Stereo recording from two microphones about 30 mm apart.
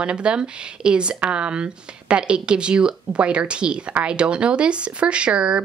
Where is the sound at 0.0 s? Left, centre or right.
Right.